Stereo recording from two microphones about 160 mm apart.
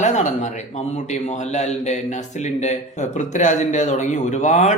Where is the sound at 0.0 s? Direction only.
50° left (ahead or behind).